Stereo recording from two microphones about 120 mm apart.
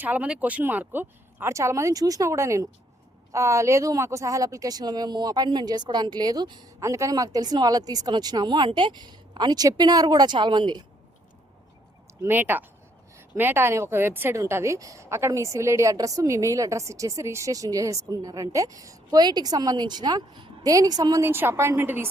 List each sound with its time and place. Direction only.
0.0 s speech: 10° right (ahead or behind); by 6.8 s 35° right (ahead or behind)
6.8 s speech: 25° right (ahead or behind)
12.2 s speech: 15° right (ahead or behind)
21.2 s speech: 20° right (ahead or behind)